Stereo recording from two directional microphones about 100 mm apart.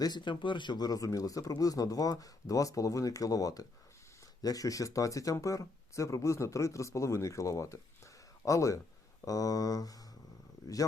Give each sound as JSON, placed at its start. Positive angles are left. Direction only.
{"t": 0.0, "sound": "speech", "side_deg": 50}